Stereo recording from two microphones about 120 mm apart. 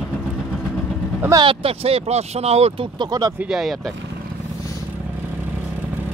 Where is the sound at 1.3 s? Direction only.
50° right (ahead or behind).